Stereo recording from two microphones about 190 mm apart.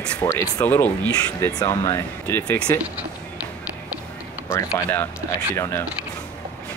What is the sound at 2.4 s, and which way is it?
Speech, 5° left (ahead or behind).